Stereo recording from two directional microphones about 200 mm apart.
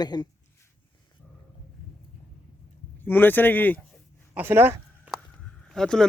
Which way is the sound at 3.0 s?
10° left (ahead or behind).